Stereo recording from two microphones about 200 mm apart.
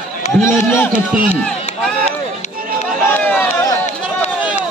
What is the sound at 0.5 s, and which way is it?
Speech, 15° left (ahead or behind).